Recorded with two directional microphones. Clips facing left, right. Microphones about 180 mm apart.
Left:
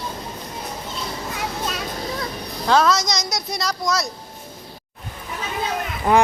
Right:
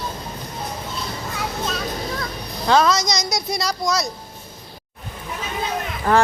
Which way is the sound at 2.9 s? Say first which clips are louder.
Even; centre (ahead or behind).